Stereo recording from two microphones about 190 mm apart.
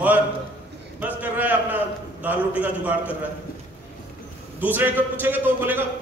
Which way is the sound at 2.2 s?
10° right (ahead or behind).